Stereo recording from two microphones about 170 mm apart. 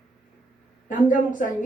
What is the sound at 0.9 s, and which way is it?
Speech, 50° left (ahead or behind).